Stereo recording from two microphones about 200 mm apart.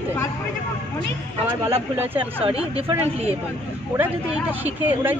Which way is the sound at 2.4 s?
30° right (ahead or behind).